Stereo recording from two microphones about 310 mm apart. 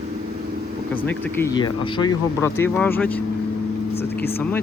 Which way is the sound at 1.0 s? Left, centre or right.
Centre.